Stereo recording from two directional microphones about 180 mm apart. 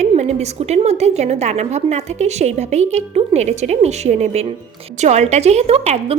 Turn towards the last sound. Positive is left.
turn(degrees=-35)  # may be behind; listen again after turning